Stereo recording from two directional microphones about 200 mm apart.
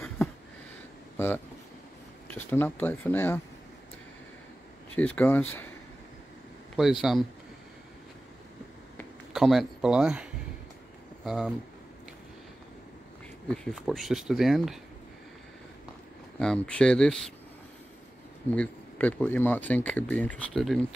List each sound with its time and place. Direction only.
1.1 s speech: 10° left (ahead or behind)
4.9 s speech: 10° left (ahead or behind)
6.8 s speech: centre (ahead or behind)
9.3 s speech: centre (ahead or behind)
11.2 s speech: centre (ahead or behind)
13.7 s speech: centre (ahead or behind)
16.3 s speech: 5° left (ahead or behind)
18.5 s speech: 5° left (ahead or behind)